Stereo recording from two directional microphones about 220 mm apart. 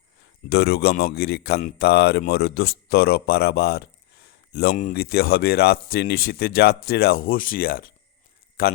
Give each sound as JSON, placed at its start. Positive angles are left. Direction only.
{"t": 0.2, "sound": "speech", "side_deg": 45}